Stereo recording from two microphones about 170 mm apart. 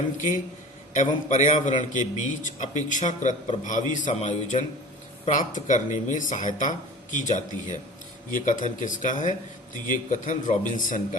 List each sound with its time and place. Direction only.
0.9 s a man's voice: 45° left (ahead or behind)